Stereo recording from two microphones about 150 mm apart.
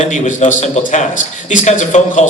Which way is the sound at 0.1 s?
55° left (ahead or behind).